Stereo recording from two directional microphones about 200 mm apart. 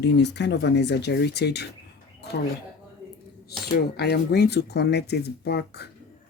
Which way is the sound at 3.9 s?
55° left (ahead or behind).